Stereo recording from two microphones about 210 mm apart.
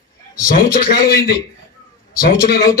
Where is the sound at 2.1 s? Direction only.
45° left (ahead or behind).